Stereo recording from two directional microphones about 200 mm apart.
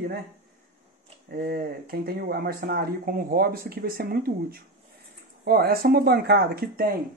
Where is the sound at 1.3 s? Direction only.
50° right (ahead or behind).